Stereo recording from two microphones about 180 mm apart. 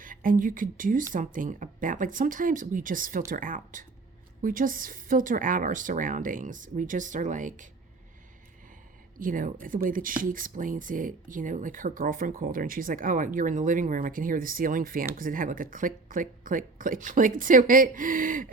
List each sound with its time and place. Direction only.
0.0 s speech: 50° right (ahead or behind)
9.1 s speech: 50° right (ahead or behind)